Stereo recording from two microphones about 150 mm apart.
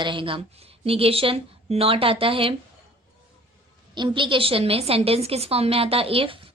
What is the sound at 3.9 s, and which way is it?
A woman's voice, 30° right (ahead or behind).